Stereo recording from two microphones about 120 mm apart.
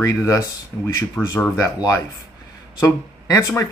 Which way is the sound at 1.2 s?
Centre (ahead or behind).